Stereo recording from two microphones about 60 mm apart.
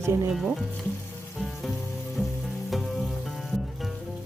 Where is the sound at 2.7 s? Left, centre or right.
Centre.